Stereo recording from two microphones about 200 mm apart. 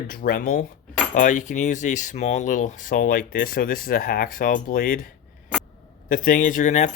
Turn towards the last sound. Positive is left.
turn(degrees=35)  # may be behind; listen again after turning